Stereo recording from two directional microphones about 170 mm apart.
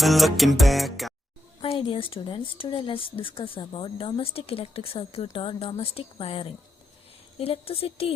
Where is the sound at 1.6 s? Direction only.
30° left (ahead or behind).